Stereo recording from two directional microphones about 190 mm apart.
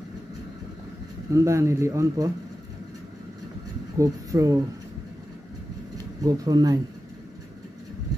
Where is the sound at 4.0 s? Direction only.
15° right (ahead or behind).